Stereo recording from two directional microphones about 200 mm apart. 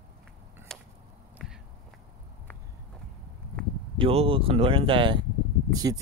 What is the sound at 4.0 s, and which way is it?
Speech, 30° right (ahead or behind).